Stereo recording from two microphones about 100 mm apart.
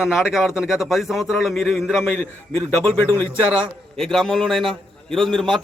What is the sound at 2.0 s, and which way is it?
A man's voice, 20° left (ahead or behind).